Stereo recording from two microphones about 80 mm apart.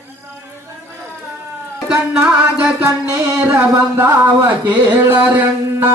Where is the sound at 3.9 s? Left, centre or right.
Right.